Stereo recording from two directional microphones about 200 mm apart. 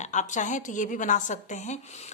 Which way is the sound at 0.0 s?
35° left (ahead or behind).